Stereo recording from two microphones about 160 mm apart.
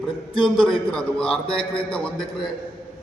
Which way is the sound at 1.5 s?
35° left (ahead or behind).